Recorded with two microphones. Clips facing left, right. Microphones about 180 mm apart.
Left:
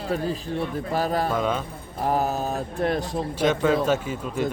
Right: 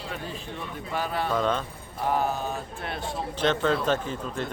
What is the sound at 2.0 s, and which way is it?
Speech, 40° left (ahead or behind).